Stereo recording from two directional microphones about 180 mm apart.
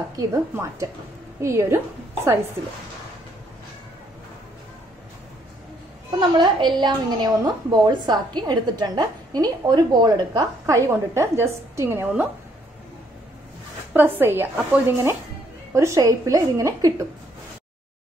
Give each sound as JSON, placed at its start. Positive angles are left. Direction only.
{"t": 0.1, "sound": "speech", "side_deg": -20}
{"t": 6.1, "sound": "a woman's voice", "side_deg": -25}
{"t": 13.9, "sound": "speech", "side_deg": -10}